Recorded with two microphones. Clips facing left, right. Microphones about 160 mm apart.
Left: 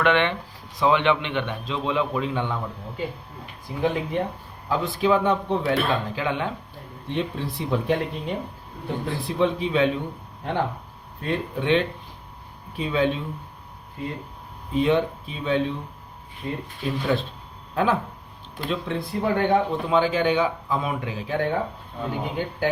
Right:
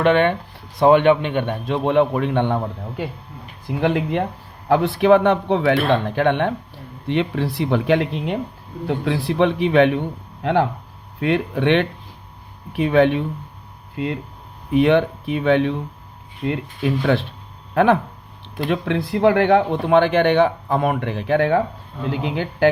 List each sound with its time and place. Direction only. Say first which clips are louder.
0.0 s speech: right 5 dB; 40° right (ahead or behind)
0.8 s a man's voice: right 7 dB; 50° right (ahead or behind)
3.8 s speech: right 4 dB; 75° right (ahead or behind)
5.9 s a man's voice: right 8 dB; 60° right (ahead or behind)
7.1 s speech: right 7 dB; 75° right (ahead or behind)
10.4 s speech: right 9 dB; 90° right
11.2 s speech: right 7 dB; 75° right (ahead or behind)
13.9 s speech: right 7 dB; 90° right
14.7 s speech: right 6 dB; 70° right (ahead or behind)